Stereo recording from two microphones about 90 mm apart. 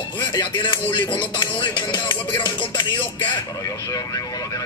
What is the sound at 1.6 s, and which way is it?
Speech, 60° left (ahead or behind).